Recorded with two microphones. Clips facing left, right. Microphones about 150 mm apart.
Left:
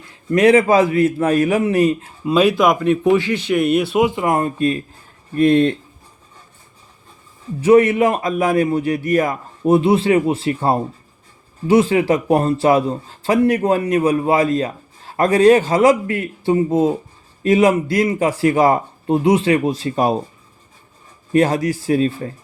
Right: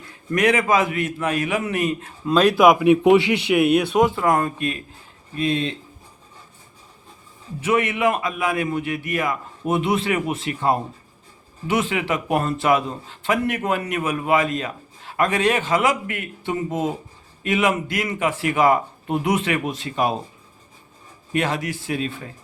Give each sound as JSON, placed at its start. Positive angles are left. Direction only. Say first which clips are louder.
{"t": 0.3, "sound": "a man's voice", "louder": "left 7 dB", "side_deg": 30}
{"t": 2.2, "sound": "speech", "louder": "left 2 dB", "side_deg": 5}
{"t": 2.6, "sound": "a man's voice", "louder": "right 1 dB", "side_deg": -5}
{"t": 5.3, "sound": "speech", "louder": "left 10 dB", "side_deg": 55}
{"t": 7.6, "sound": "a man's voice", "louder": "left 8 dB", "side_deg": 40}
{"t": 21.3, "sound": "a man's voice", "louder": "left 8 dB", "side_deg": 40}